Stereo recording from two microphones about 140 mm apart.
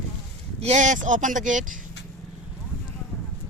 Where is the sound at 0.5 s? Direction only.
55° right (ahead or behind).